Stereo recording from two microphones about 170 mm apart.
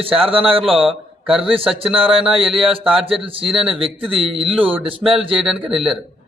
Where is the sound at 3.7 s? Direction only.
30° right (ahead or behind).